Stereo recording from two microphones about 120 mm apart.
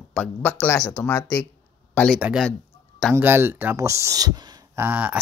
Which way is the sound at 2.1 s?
10° right (ahead or behind).